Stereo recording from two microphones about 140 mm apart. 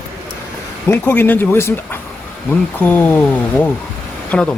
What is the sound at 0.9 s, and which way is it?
Speech, 15° left (ahead or behind).